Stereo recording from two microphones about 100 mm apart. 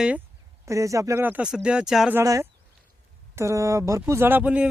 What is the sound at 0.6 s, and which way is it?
Speech, 30° right (ahead or behind).